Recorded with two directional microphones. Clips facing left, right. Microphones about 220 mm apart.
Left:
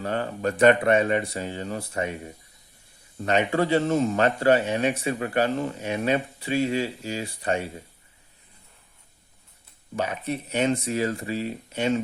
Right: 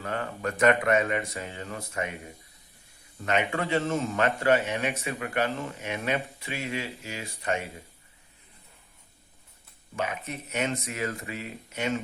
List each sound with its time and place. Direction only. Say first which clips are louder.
0.0 s speech: left 5 dB; 30° left (ahead or behind)
3.2 s speech: left 5 dB; 35° left (ahead or behind)
9.9 s speech: left 5 dB; 35° left (ahead or behind)